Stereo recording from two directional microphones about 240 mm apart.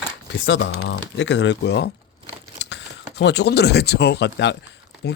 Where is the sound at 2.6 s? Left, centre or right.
Left.